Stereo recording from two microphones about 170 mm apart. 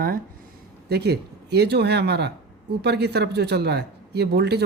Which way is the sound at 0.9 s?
70° right (ahead or behind).